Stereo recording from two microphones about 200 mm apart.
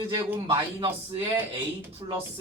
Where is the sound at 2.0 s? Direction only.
20° right (ahead or behind).